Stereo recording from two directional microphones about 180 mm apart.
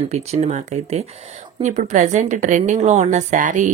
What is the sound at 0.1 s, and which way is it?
A woman's voice, 35° right (ahead or behind).